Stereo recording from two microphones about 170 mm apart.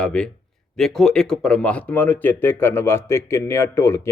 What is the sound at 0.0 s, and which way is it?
A man's voice, 5° left (ahead or behind).